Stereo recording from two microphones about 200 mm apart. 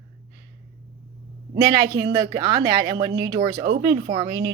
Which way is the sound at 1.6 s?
60° right (ahead or behind).